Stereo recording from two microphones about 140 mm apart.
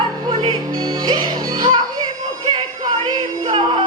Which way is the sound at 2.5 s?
35° right (ahead or behind).